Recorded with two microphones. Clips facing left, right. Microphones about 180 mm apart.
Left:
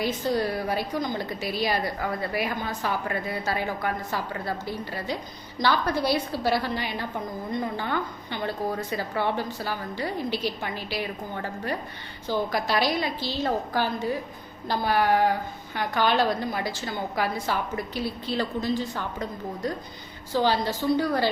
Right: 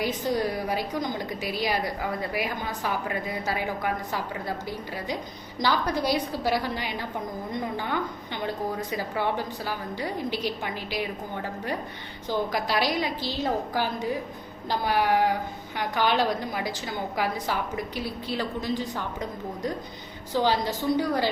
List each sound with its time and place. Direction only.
0.0 s a woman's voice: 15° right (ahead or behind)
12.3 s a woman's voice: 15° right (ahead or behind)